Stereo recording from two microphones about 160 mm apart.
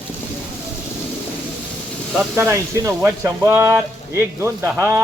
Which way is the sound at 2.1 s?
15° right (ahead or behind).